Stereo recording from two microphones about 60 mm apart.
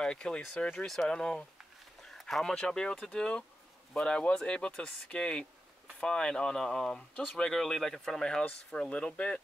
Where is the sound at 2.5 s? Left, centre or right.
Centre.